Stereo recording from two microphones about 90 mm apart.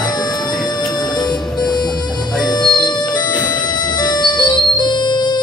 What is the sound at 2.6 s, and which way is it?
Music, 50° left (ahead or behind).